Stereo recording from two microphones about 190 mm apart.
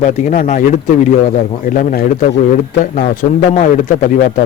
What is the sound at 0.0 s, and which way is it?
A man's voice, 40° left (ahead or behind).